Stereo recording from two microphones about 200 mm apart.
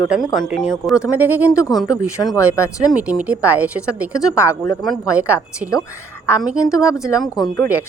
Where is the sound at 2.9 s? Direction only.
5° right (ahead or behind).